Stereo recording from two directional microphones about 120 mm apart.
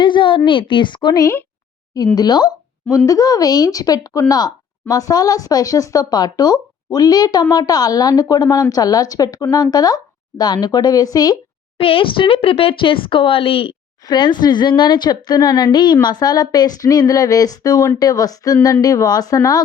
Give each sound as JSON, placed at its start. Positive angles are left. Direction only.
{"t": 0.0, "sound": "a woman's voice", "side_deg": 40}
{"t": 11.8, "sound": "speech", "side_deg": 45}
{"t": 14.0, "sound": "a woman's voice", "side_deg": 35}